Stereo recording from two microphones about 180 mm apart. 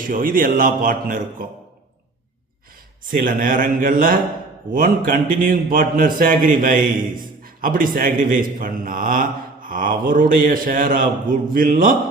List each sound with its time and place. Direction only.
0.1 s a man's voice: 50° right (ahead or behind)
3.1 s a man's voice: 50° right (ahead or behind)